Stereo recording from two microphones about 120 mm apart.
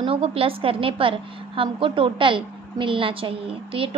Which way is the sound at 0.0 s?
50° right (ahead or behind).